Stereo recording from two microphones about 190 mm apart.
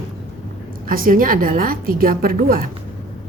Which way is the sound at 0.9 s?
45° right (ahead or behind).